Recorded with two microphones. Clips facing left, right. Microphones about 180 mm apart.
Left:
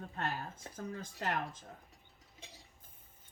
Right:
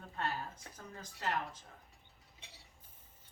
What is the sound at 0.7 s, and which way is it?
Speech, 50° left (ahead or behind).